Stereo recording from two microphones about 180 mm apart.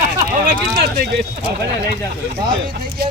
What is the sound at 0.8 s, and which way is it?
Speech, 60° right (ahead or behind).